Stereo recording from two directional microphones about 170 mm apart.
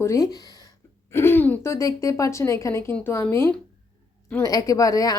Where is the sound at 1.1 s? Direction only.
15° left (ahead or behind).